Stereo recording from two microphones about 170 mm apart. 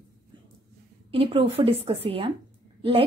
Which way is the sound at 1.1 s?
35° right (ahead or behind).